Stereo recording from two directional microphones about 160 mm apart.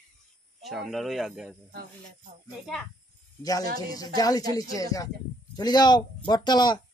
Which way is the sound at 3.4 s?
20° left (ahead or behind).